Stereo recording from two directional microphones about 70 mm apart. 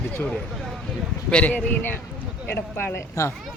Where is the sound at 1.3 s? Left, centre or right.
Centre.